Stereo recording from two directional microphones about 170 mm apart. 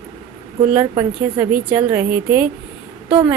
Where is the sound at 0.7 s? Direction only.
10° right (ahead or behind).